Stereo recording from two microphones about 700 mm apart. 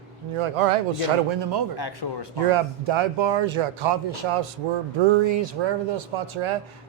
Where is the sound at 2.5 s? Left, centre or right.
Right.